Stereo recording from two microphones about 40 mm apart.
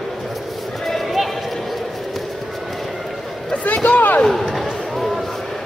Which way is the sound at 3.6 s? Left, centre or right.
Left.